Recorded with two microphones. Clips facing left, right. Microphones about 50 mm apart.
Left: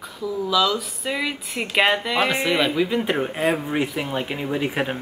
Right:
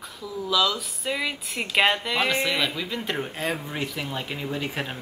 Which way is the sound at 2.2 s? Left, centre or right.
Centre.